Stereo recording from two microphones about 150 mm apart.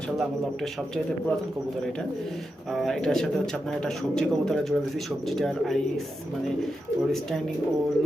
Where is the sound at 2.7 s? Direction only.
Centre (ahead or behind).